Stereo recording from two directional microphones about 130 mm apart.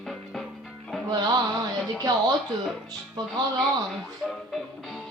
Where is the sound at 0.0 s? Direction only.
Centre (ahead or behind).